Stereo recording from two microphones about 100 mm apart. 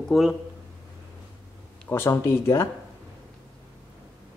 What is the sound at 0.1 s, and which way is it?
Speech, 5° right (ahead or behind).